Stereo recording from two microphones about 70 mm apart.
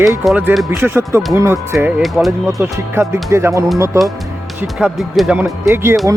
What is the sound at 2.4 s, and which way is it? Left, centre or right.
Speech, right.